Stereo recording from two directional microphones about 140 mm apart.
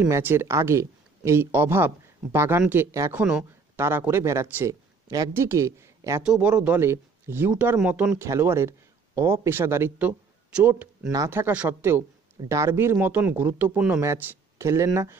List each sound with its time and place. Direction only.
0.1 s speech: 15° right (ahead or behind)
3.2 s a sound: 10° right (ahead or behind)
3.8 s speech: 20° right (ahead or behind)
6.2 s speech: 5° right (ahead or behind)